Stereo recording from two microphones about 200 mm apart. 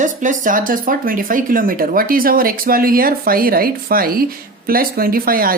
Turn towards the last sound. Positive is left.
turn(degrees=-45)  # may be behind; listen again after turning